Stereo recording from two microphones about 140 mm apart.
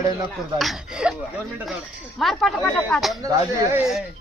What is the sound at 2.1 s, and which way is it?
Speech, centre (ahead or behind).